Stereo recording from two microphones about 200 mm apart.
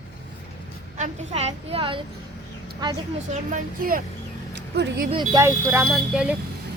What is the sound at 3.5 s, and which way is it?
Speech, 45° right (ahead or behind).